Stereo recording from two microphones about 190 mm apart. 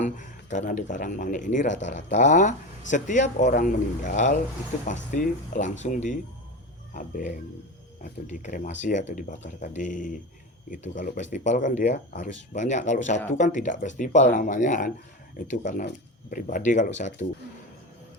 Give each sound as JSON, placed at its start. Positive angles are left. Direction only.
{"t": 0.0, "sound": "speech", "side_deg": 40}